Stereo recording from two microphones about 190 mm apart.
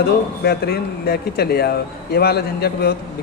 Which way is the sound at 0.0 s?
55° left (ahead or behind).